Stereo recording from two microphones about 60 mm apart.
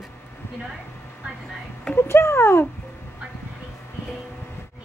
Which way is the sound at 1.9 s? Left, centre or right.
Left.